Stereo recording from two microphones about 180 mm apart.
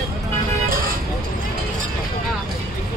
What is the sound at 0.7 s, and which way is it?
Vehicle, 55° right (ahead or behind).